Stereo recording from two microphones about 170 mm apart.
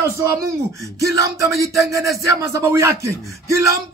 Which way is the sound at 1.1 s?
20° right (ahead or behind).